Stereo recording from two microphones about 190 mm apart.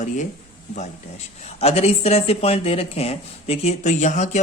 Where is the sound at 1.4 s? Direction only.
35° left (ahead or behind).